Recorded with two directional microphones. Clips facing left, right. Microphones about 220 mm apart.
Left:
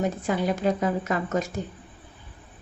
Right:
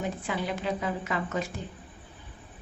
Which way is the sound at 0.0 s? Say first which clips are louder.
Left 6 dB; 45° left (ahead or behind).